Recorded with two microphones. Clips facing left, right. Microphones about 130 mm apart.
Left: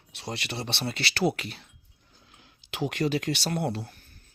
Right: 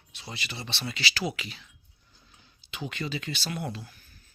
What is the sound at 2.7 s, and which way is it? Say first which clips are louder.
Speech: left 7 dB; 75° left (ahead or behind).